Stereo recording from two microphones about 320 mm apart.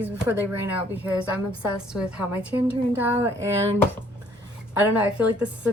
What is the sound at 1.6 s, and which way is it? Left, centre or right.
Speech, centre.